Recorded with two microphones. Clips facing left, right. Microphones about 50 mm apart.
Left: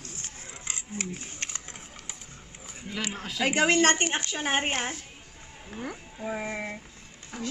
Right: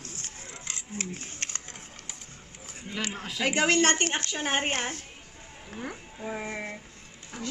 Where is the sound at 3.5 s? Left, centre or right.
Centre.